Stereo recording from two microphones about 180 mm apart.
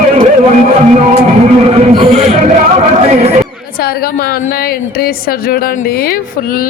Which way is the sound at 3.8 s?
60° left (ahead or behind).